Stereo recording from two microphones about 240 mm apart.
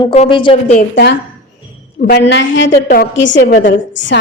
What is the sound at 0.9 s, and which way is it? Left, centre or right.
A woman's voice, left.